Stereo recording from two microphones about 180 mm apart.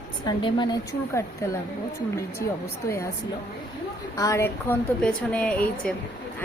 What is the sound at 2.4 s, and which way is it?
Speech, 65° left (ahead or behind).